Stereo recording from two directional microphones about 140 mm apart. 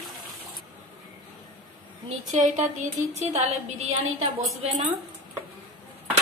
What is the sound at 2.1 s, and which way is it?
Speech, 60° right (ahead or behind).